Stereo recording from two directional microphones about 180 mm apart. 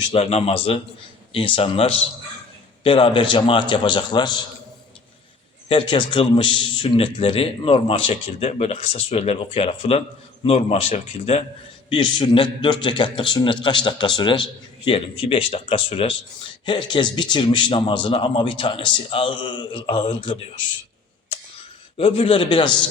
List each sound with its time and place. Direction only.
0.1 s a man's voice: 35° left (ahead or behind)
5.6 s a man's voice: 30° left (ahead or behind)
11.9 s a man's voice: 25° left (ahead or behind)
21.9 s a man's voice: 30° left (ahead or behind)